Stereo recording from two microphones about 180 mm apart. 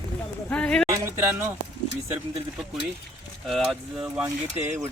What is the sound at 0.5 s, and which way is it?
Speech, 5° left (ahead or behind).